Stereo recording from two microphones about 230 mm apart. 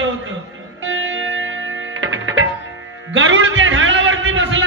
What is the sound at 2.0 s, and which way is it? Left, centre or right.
Music, right.